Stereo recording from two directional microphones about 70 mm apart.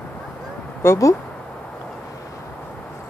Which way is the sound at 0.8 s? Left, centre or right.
Left.